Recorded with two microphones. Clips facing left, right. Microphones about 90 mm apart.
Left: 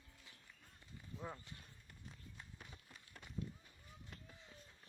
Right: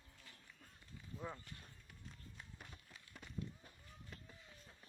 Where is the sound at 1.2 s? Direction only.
Centre (ahead or behind).